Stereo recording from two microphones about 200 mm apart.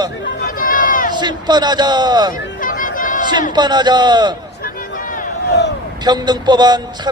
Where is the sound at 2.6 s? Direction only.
45° left (ahead or behind).